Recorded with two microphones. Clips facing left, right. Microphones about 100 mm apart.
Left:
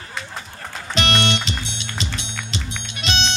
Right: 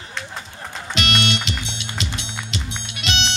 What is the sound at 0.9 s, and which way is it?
Music, 30° left (ahead or behind).